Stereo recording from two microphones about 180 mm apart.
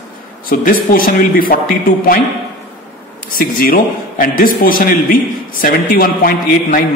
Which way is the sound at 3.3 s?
50° left (ahead or behind).